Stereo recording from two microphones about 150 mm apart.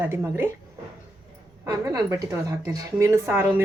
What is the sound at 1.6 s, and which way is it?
A woman's voice, 20° right (ahead or behind).